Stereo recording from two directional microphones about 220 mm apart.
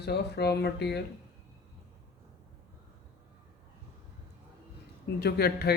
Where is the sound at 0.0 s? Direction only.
50° left (ahead or behind).